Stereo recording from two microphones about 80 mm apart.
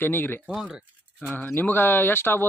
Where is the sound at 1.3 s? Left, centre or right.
Left.